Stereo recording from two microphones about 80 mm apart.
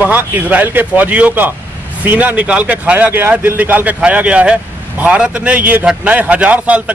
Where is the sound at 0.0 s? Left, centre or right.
Centre.